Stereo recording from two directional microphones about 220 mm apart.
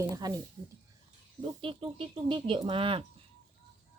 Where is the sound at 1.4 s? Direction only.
25° right (ahead or behind).